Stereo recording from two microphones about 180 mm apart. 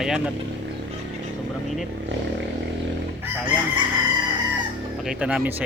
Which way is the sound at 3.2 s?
10° right (ahead or behind).